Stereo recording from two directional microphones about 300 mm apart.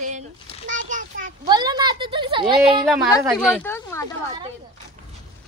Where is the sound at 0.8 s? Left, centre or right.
Right.